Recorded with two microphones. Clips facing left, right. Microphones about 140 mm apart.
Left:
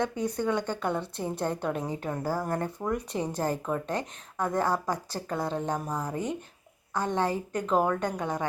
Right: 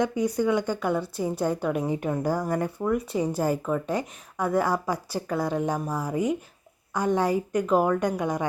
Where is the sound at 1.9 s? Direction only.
15° right (ahead or behind).